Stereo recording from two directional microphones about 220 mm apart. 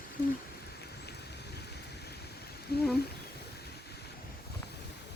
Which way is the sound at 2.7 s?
45° left (ahead or behind).